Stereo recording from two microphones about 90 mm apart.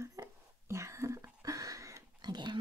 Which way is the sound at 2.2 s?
55° right (ahead or behind).